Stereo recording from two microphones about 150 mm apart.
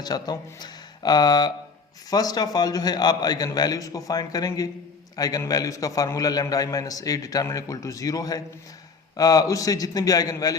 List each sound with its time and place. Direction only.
0.0 s a man's voice: 25° left (ahead or behind)